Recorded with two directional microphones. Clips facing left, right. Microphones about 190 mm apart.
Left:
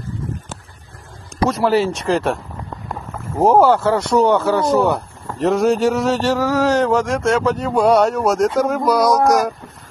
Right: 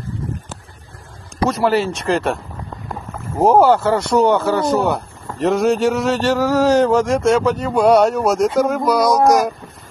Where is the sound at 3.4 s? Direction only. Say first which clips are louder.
Even; 5° right (ahead or behind).